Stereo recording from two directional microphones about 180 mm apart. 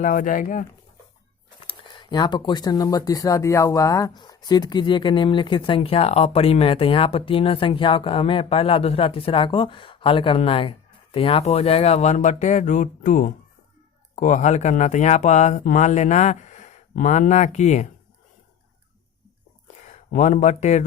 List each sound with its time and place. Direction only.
0.0 s speech: 45° left (ahead or behind)
1.6 s speech: 25° left (ahead or behind); by 17.8 s 40° left (ahead or behind)
19.6 s a sound: 40° left (ahead or behind)